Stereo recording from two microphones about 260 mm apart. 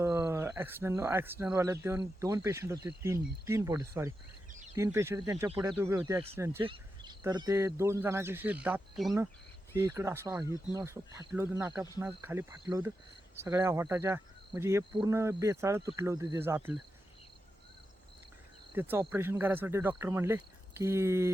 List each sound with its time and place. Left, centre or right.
0.0 s speech: centre
18.7 s speech: centre